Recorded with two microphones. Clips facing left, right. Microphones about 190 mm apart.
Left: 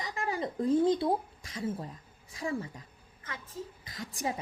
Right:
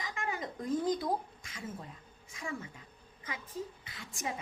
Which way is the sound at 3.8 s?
40° left (ahead or behind).